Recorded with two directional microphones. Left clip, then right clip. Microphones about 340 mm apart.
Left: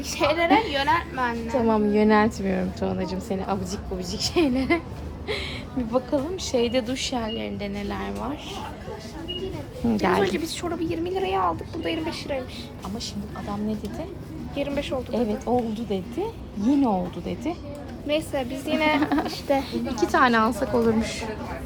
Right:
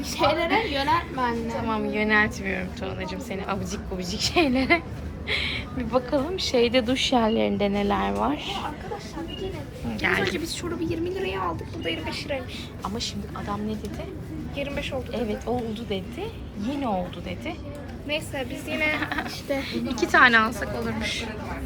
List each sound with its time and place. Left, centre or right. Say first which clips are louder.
0.2 s a woman's voice: left 2 dB; centre
1.6 s a woman's voice: left 6 dB; centre
10.0 s a woman's voice: left 1 dB; centre
11.8 s a woman's voice: left 1 dB; left
14.5 s a woman's voice: left 3 dB; left
15.1 s a woman's voice: left 5 dB; centre
18.1 s a woman's voice: left 4 dB; left
19.0 s a woman's voice: left 4 dB; centre